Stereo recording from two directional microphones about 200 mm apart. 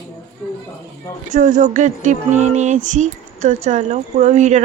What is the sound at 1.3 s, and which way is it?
Music, 35° right (ahead or behind).